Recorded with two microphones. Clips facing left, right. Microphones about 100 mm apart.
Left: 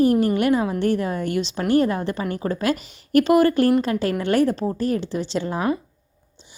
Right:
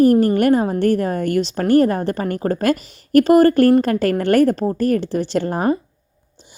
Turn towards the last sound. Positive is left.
turn(degrees=-45)  # may be behind; listen again after turning